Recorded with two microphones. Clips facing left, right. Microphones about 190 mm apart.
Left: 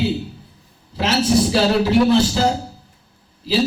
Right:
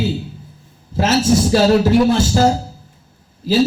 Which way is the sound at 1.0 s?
45° right (ahead or behind).